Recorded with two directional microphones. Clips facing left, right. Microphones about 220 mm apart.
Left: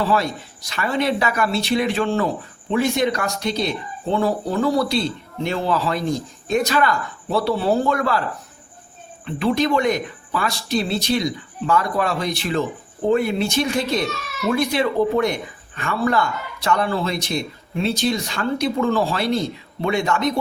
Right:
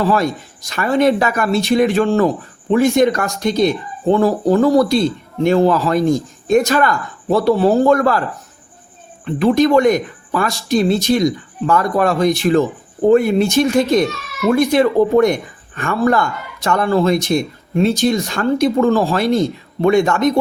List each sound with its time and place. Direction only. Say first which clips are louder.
0.1 s speech: right 4 dB; 45° right (ahead or behind)
9.2 s speech: right 7 dB; 45° right (ahead or behind)